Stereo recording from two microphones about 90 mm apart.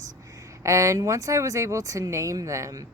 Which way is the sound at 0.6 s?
35° right (ahead or behind).